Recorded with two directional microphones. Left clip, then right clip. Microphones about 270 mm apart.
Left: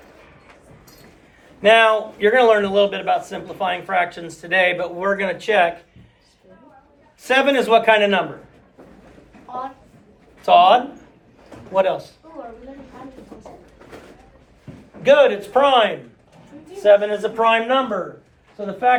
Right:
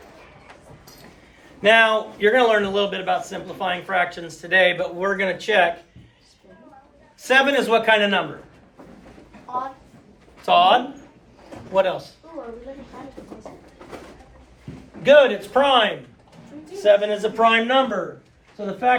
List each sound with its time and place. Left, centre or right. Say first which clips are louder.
1.6 s speech: left 2 dB; centre
7.3 s speech: left 1 dB; left
10.4 s speech: left 3 dB; left
15.0 s a man's voice: even; left; by 18.9 s centre